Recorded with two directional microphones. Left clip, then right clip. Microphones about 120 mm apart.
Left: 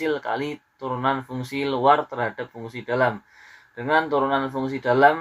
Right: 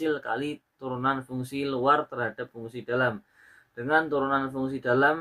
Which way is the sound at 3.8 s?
30° right (ahead or behind).